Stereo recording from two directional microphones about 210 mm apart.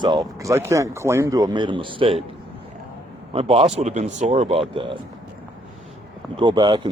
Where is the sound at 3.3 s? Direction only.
25° right (ahead or behind).